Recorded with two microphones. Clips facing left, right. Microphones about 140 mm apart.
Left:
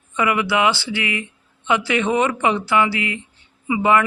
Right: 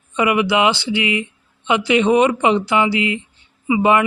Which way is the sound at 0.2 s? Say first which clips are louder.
Right 3 dB; 20° right (ahead or behind).